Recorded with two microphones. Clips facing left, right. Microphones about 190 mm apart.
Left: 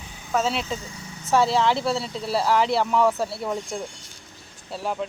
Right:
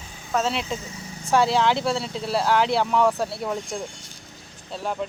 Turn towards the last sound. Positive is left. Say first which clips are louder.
# even
turn(degrees=5)  # may be behind; listen again after turning